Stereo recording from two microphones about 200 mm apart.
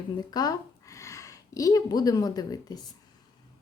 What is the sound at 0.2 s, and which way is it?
Speech, 20° left (ahead or behind).